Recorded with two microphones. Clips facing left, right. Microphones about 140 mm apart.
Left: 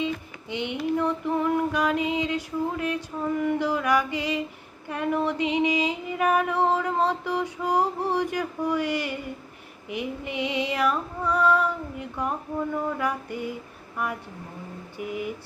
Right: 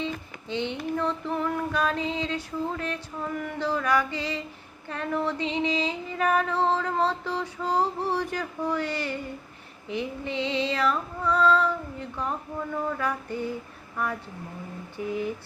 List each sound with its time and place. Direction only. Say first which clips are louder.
0.0 s a sound: left 3 dB; 15° left (ahead or behind)
0.9 s female singing: left 3 dB; 15° left (ahead or behind)
13.9 s speech: even; 15° left (ahead or behind)
14.9 s female singing: right 2 dB; 15° left (ahead or behind)